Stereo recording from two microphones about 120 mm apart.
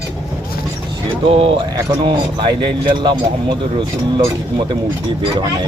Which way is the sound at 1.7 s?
35° right (ahead or behind).